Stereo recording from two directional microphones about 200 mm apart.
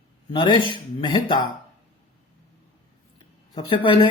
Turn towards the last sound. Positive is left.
turn(degrees=25)  # may be behind; listen again after turning